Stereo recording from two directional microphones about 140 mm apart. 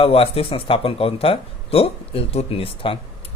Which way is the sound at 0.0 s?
45° left (ahead or behind).